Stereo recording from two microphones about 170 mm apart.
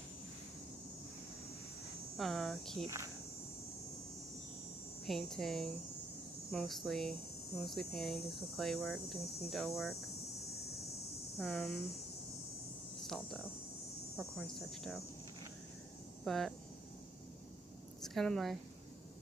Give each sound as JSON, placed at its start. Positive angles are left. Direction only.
{"t": 2.1, "sound": "speech", "side_deg": 0}
{"t": 5.0, "sound": "speech", "side_deg": 0}
{"t": 11.3, "sound": "speech", "side_deg": 0}
{"t": 13.0, "sound": "speech", "side_deg": 0}
{"t": 16.3, "sound": "speech", "side_deg": 0}
{"t": 18.0, "sound": "speech", "side_deg": 5}